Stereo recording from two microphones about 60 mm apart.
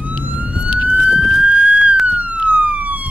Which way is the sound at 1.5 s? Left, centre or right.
Right.